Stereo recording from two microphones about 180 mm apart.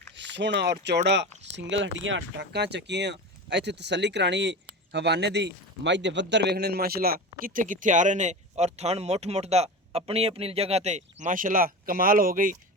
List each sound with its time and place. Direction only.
0.2 s speech: 75° right (ahead or behind)
1.4 s speech: 85° right; by 12.5 s 50° right (ahead or behind)